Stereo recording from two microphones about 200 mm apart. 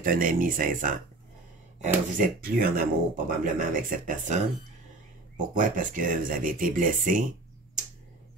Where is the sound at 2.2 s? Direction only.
45° right (ahead or behind).